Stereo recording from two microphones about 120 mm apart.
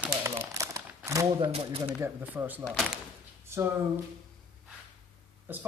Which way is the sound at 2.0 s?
15° right (ahead or behind).